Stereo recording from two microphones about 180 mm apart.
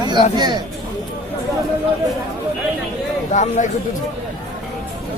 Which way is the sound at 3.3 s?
40° left (ahead or behind).